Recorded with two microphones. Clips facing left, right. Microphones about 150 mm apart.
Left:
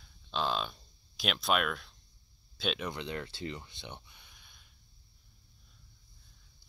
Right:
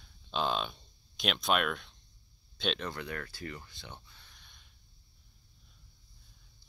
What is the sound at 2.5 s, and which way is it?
Speech, 5° left (ahead or behind).